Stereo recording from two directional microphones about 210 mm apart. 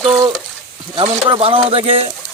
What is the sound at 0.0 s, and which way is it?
A man's voice, 20° right (ahead or behind).